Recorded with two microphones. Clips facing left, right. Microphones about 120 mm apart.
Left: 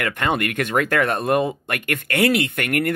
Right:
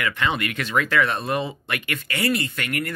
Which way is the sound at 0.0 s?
50° left (ahead or behind).